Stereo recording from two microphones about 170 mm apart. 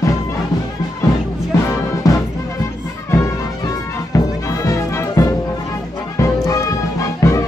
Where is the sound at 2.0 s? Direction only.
20° left (ahead or behind).